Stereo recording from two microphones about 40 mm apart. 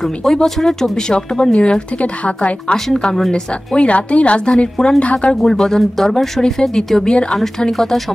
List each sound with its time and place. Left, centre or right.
0.0 s speech: centre; by 2.5 s left
2.7 s a woman's voice: centre
3.8 s speech: left
5.3 s speech: centre
7.1 s a woman's voice: left
7.7 s speech: centre